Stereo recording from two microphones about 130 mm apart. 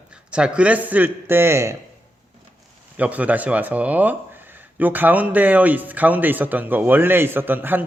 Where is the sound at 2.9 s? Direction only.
10° right (ahead or behind).